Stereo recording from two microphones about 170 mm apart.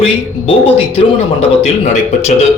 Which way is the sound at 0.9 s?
35° left (ahead or behind).